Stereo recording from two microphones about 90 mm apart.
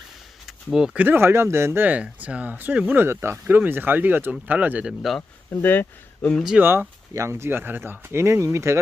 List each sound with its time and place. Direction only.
0.4 s a sound: 5° right (ahead or behind)
0.9 s speech: 25° right (ahead or behind)
5.6 s speech: 20° left (ahead or behind)
6.6 s speech: 25° right (ahead or behind)